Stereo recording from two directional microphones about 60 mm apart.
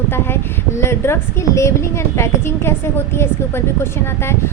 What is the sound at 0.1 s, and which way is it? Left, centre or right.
A woman's voice, left.